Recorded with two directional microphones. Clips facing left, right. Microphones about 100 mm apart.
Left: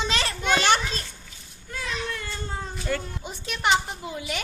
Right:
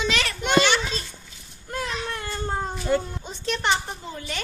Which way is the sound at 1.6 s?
50° right (ahead or behind).